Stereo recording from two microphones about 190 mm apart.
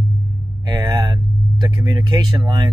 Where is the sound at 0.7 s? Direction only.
20° right (ahead or behind).